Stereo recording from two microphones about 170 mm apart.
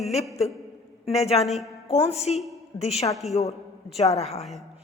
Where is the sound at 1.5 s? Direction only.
Centre (ahead or behind).